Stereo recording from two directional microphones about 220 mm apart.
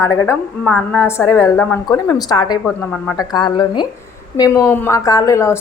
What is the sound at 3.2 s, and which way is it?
A woman's voice, 20° left (ahead or behind).